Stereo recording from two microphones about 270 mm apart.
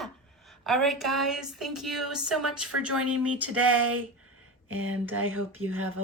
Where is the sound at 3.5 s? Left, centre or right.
Right.